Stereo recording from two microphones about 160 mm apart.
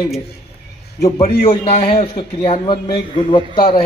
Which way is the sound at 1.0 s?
45° left (ahead or behind).